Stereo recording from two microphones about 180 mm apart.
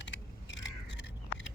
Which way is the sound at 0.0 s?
85° left.